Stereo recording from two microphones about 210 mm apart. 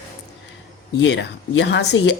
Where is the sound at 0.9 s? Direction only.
55° left (ahead or behind).